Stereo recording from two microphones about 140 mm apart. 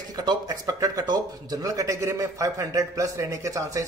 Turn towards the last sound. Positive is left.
turn(degrees=-20)  # may be behind; listen again after turning